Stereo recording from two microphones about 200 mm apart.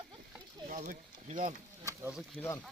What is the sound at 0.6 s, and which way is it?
Speech, 45° right (ahead or behind).